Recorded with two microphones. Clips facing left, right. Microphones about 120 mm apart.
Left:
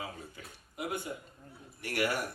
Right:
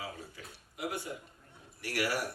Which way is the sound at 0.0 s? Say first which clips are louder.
Left 1 dB; 25° left (ahead or behind).